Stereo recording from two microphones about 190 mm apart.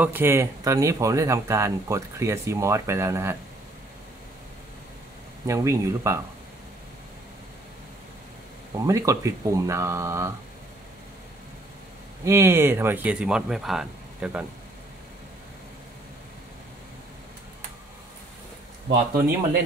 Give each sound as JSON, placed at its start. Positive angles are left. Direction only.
{"t": 0.0, "sound": "speech", "side_deg": -10}
{"t": 5.5, "sound": "speech", "side_deg": -15}
{"t": 8.8, "sound": "speech", "side_deg": -15}
{"t": 12.3, "sound": "speech", "side_deg": -15}
{"t": 18.9, "sound": "speech", "side_deg": -55}